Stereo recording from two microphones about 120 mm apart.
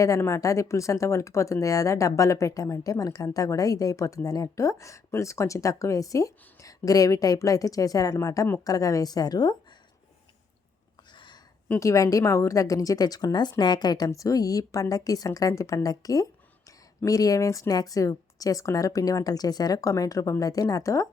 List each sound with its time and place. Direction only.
0.0 s a woman's voice: 25° left (ahead or behind)
11.1 s a sound: 40° left (ahead or behind)
11.8 s speech: 25° left (ahead or behind)